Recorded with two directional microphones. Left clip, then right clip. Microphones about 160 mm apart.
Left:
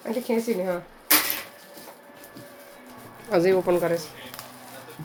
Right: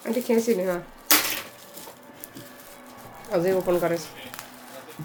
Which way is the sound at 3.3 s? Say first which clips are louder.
Left 3 dB; 55° left (ahead or behind).